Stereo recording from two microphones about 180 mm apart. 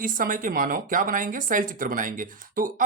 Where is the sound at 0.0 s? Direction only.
50° right (ahead or behind).